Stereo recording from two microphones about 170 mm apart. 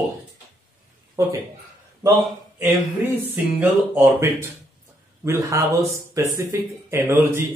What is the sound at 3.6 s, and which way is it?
Speech, 15° right (ahead or behind).